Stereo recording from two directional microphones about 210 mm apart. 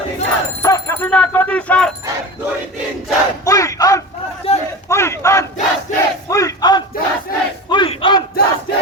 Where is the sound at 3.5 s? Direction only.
15° left (ahead or behind).